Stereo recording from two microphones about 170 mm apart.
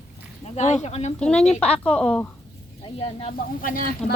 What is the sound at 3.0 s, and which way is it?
Speech, 35° left (ahead or behind).